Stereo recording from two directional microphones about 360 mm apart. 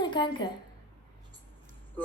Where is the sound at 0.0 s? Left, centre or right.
Centre.